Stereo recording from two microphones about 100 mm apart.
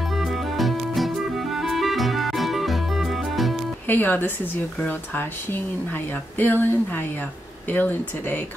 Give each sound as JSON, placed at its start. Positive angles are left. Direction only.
{"t": 0.1, "sound": "music", "side_deg": 0}
{"t": 3.8, "sound": "speech", "side_deg": 20}